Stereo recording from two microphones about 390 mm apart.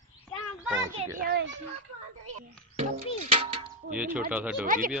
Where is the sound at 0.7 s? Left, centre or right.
Centre.